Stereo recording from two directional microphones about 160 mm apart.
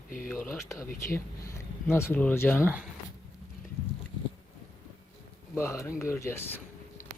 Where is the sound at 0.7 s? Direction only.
20° left (ahead or behind).